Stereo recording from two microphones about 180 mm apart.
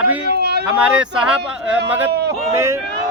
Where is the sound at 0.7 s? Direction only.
5° right (ahead or behind).